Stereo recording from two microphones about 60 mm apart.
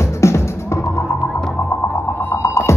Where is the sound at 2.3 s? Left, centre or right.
Left.